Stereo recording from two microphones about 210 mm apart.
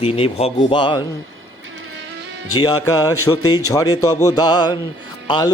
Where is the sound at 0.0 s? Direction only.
30° left (ahead or behind).